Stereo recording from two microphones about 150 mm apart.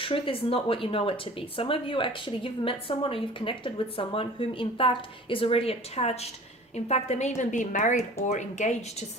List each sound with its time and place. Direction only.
0.0 s a woman's voice: 35° left (ahead or behind); by 9.0 s 50° left (ahead or behind)